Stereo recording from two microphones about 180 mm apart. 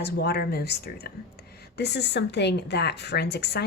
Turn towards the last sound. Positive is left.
turn(degrees=65)  # may be behind; listen again after turning